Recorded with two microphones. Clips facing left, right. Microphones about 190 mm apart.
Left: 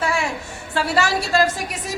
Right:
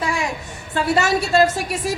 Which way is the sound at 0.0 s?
15° right (ahead or behind).